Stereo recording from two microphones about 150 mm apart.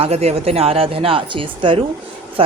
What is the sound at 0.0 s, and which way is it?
A woman's voice, 45° right (ahead or behind).